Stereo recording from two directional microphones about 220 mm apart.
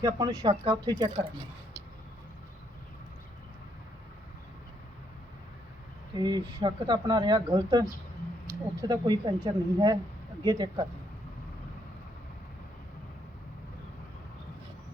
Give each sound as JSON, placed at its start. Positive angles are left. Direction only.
{"t": 0.0, "sound": "speech", "side_deg": -20}
{"t": 6.1, "sound": "speech", "side_deg": -20}